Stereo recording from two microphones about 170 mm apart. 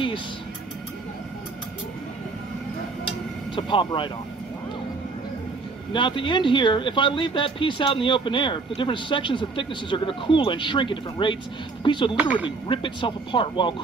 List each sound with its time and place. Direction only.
3.5 s speech: 30° left (ahead or behind)
5.9 s speech: 30° left (ahead or behind)
12.2 s speech: 10° right (ahead or behind)
12.4 s speech: 30° left (ahead or behind)